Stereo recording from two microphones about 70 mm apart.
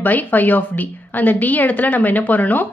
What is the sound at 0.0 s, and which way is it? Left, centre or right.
A woman's voice, left.